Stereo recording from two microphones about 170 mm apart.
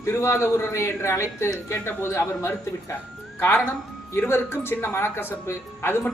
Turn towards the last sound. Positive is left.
turn(degrees=15)  # may be behind; listen again after turning